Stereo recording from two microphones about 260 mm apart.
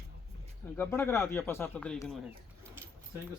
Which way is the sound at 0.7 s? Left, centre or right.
Centre.